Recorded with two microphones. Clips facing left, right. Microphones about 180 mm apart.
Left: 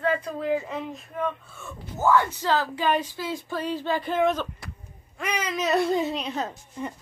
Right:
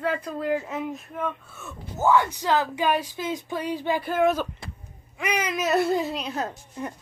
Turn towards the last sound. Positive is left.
turn(degrees=-5)  # may be behind; listen again after turning